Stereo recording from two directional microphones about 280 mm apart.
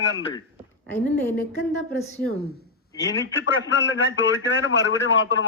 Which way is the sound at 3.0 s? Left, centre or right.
Left.